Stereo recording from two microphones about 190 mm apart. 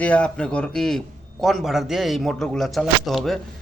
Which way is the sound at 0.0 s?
5° left (ahead or behind).